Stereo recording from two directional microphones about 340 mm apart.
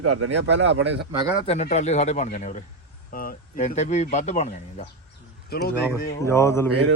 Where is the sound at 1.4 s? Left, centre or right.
Centre.